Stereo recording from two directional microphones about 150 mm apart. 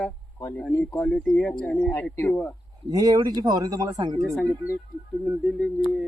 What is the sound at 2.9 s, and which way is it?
Speech, 25° right (ahead or behind).